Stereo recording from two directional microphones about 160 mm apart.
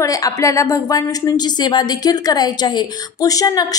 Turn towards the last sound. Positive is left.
turn(degrees=20)  # may be behind; listen again after turning